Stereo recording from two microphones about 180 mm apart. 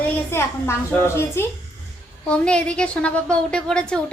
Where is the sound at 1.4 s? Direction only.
15° left (ahead or behind).